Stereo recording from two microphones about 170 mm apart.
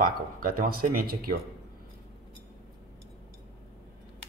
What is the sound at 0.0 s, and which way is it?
Speech, 55° right (ahead or behind).